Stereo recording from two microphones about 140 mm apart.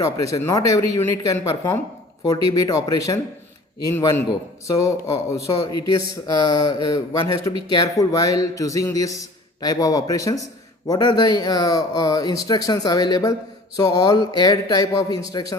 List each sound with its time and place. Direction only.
0.3 s a man's voice: 25° left (ahead or behind)